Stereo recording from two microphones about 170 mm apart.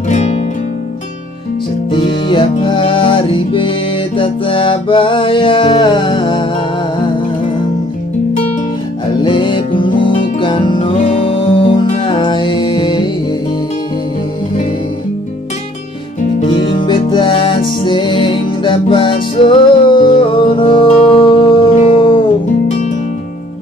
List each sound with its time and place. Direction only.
0.1 s music: 40° left (ahead or behind)
1.9 s music: 30° left (ahead or behind)
9.2 s music: 30° left (ahead or behind)
16.3 s music: 30° left (ahead or behind)